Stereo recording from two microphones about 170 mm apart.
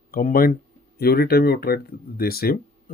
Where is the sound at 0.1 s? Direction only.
55° left (ahead or behind).